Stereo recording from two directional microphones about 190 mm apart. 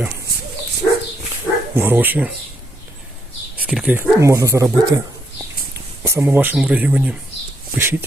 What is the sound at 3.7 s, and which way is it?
Speech, 5° right (ahead or behind).